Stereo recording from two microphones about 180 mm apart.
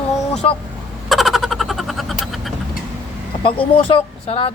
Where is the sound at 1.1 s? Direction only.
Centre (ahead or behind).